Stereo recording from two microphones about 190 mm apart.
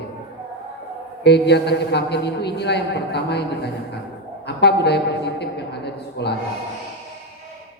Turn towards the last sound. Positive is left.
turn(degrees=60)  # may be behind; listen again after turning